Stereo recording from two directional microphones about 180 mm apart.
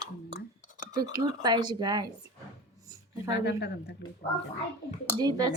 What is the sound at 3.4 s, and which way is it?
Speech, 65° left (ahead or behind).